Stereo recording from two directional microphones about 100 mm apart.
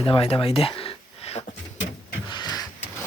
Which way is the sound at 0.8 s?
80° left.